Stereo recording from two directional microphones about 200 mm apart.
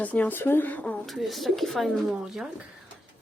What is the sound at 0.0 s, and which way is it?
Speech, 10° left (ahead or behind).